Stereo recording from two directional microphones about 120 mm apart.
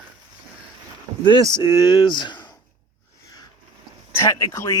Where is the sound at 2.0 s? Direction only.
40° left (ahead or behind).